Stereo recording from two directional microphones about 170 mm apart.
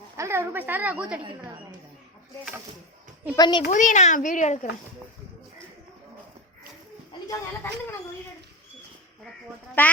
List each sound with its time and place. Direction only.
0.2 s a woman's voice: 15° right (ahead or behind)
3.3 s speech: 25° left (ahead or behind)
3.7 s a child's voice: 45° left (ahead or behind)
7.3 s speech: 10° left (ahead or behind)
9.8 s speech: 15° left (ahead or behind)